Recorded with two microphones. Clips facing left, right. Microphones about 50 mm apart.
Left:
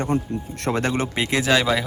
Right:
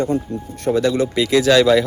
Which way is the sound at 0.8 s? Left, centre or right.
Left.